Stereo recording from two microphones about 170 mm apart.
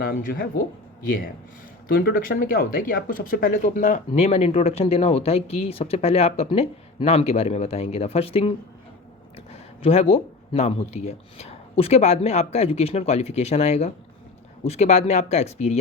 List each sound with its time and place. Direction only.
0.0 s speech: 60° left (ahead or behind)
1.9 s speech: 60° left (ahead or behind); by 8.5 s 35° left (ahead or behind)
9.8 s speech: 35° left (ahead or behind)